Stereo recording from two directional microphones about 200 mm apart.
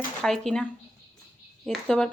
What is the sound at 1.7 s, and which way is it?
Speech, 5° left (ahead or behind).